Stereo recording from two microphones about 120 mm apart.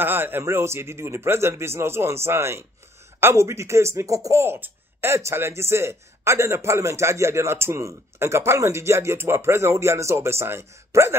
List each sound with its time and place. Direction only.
0.0 s speech: 15° right (ahead or behind)